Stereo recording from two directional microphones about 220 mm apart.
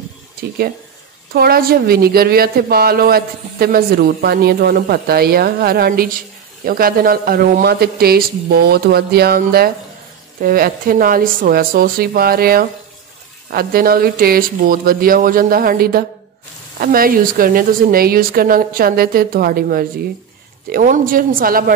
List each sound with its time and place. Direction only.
1.3 s a woman's voice: 45° right (ahead or behind)